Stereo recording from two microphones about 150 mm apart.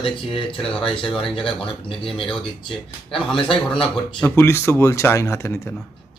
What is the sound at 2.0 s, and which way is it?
Speech, 35° left (ahead or behind).